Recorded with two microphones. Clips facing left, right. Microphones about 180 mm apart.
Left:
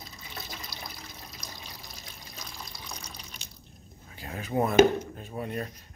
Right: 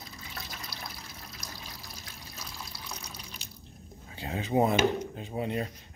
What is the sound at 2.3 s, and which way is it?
Water, 5° right (ahead or behind).